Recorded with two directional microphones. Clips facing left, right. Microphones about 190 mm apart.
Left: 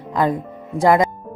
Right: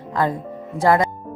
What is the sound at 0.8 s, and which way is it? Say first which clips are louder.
Speech: left 2 dB; 15° left (ahead or behind).